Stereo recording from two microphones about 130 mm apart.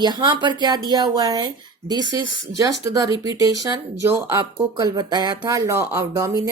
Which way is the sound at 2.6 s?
25° right (ahead or behind).